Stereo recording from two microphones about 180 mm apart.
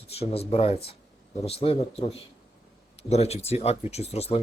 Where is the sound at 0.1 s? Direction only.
35° left (ahead or behind).